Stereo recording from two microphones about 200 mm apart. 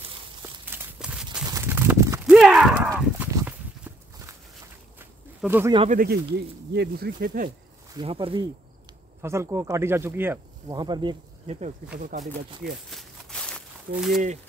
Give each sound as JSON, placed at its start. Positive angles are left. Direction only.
{"t": 0.7, "sound": "walk", "side_deg": -5}
{"t": 1.4, "sound": "horse", "side_deg": -15}
{"t": 2.3, "sound": "walk", "side_deg": 0}
{"t": 5.9, "sound": "speech", "side_deg": -45}
{"t": 7.9, "sound": "speech", "side_deg": -25}
{"t": 9.2, "sound": "speech", "side_deg": -15}
{"t": 12.0, "sound": "speech", "side_deg": -40}
{"t": 12.9, "sound": "a sound", "side_deg": 5}
{"t": 13.9, "sound": "speech", "side_deg": 0}